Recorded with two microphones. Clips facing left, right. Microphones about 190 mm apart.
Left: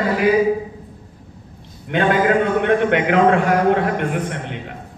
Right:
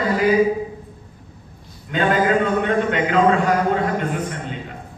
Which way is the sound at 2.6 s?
65° left (ahead or behind).